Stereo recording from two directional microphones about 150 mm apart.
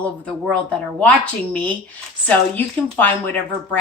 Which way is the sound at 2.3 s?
10° left (ahead or behind).